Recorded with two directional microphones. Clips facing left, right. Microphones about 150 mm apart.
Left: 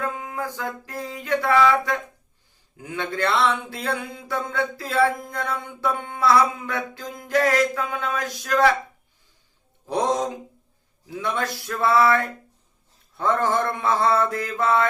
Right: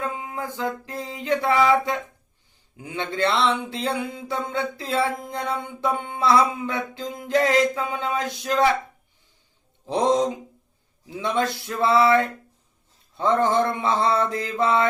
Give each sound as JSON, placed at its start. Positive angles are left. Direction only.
{"t": 0.0, "sound": "a sound", "side_deg": -20}
{"t": 2.7, "sound": "speech", "side_deg": -20}
{"t": 11.2, "sound": "speech", "side_deg": -20}